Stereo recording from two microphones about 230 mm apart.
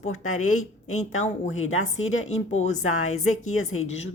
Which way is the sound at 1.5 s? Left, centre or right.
Left.